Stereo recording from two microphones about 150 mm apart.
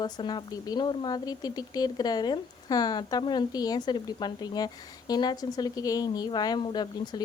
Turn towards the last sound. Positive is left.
turn(degrees=30)  # may be behind; listen again after turning